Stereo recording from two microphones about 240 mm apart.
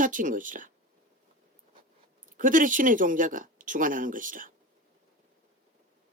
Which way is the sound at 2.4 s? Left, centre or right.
Right.